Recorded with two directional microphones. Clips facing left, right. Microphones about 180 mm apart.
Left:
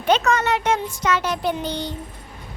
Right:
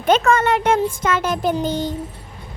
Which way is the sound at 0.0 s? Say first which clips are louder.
Right 3 dB; 50° right (ahead or behind).